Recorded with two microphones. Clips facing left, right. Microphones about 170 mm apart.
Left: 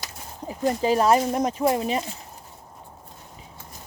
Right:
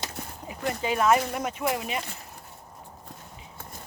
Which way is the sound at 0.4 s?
35° left (ahead or behind).